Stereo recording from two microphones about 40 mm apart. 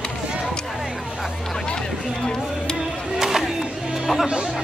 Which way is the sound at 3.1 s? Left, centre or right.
Centre.